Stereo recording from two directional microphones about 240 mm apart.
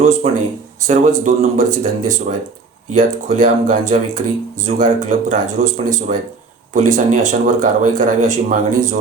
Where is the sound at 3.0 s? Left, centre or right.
Right.